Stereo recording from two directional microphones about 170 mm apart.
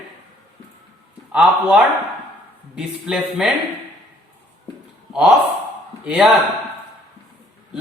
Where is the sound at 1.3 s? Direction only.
5° right (ahead or behind).